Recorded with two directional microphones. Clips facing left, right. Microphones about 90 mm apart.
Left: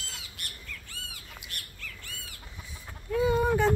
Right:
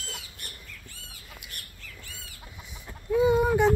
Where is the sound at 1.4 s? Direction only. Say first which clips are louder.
Left 3 dB; 55° right (ahead or behind).